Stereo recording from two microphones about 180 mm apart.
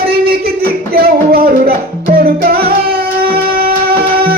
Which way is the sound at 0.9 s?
55° right (ahead or behind).